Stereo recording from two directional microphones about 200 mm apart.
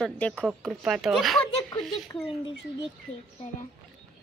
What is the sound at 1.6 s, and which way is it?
Speech, 20° left (ahead or behind).